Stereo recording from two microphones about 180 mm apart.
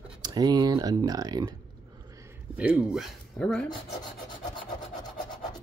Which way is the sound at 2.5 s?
5° right (ahead or behind).